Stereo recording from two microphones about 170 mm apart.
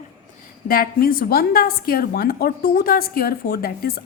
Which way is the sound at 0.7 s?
60° left (ahead or behind).